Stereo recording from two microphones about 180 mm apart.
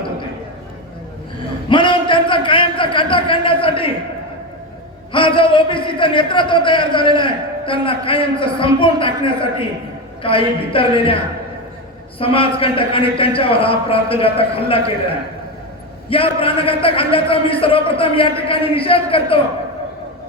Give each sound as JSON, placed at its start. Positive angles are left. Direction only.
{"t": 1.7, "sound": "a sound", "side_deg": 25}
{"t": 5.1, "sound": "a man's voice", "side_deg": 30}
{"t": 12.2, "sound": "a man's voice", "side_deg": 30}
{"t": 16.0, "sound": "a man's voice", "side_deg": 30}